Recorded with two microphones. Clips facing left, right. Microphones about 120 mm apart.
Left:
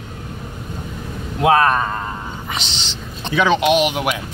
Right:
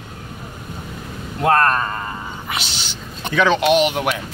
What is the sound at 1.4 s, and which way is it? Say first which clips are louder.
Speech: left 2 dB; 5° left (ahead or behind).